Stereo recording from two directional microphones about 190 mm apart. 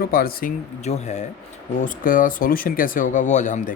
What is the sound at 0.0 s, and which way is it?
Speech, 50° left (ahead or behind).